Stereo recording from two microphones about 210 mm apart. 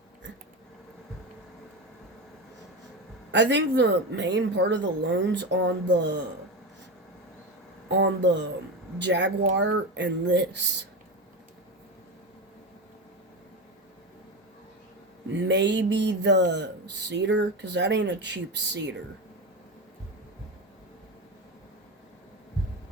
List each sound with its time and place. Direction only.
3.3 s speech: 55° right (ahead or behind)
7.9 s speech: 55° right (ahead or behind)
15.3 s speech: 55° right (ahead or behind)